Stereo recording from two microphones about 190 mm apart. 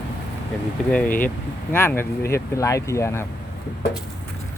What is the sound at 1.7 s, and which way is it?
Speech, 10° left (ahead or behind).